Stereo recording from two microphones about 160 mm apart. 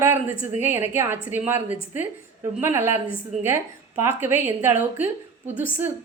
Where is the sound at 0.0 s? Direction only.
10° right (ahead or behind).